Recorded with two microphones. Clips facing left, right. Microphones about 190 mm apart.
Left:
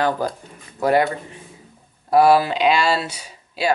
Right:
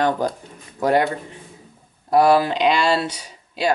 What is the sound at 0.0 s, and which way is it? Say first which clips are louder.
Speech: right 1 dB; 5° left (ahead or behind).